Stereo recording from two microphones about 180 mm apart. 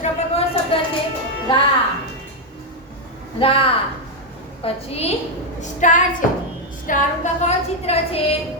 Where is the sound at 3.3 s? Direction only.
30° left (ahead or behind).